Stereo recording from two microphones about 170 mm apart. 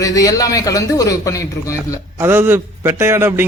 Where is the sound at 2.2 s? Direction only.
10° right (ahead or behind).